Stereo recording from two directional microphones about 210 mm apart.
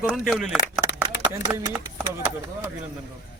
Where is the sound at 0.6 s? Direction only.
55° left (ahead or behind).